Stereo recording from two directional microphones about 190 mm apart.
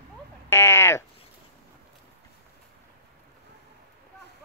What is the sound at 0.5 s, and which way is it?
Sheep, 15° left (ahead or behind).